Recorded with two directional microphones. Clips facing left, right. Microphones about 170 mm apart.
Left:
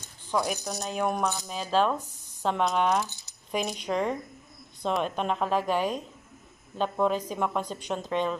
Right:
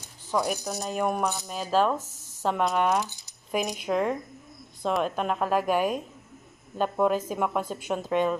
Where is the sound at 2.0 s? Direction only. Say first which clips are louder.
Even; 40° right (ahead or behind).